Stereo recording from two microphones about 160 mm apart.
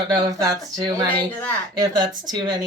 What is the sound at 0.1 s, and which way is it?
Speech, 25° right (ahead or behind).